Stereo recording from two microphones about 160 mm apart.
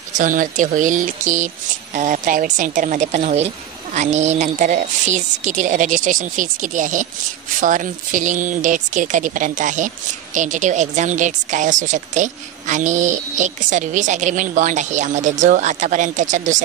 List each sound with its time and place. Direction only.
0.1 s speech: 55° right (ahead or behind)